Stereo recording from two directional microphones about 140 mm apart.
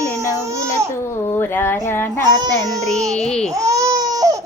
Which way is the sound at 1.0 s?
15° left (ahead or behind).